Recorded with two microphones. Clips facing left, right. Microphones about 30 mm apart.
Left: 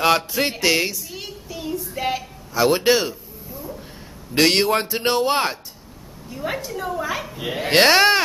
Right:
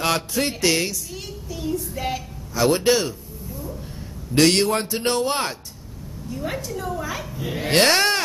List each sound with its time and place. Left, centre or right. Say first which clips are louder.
0.0 s child singing: left 4 dB; centre
2.0 s a sound: left 3 dB; centre
4.4 s a man's voice: left 1 dB; centre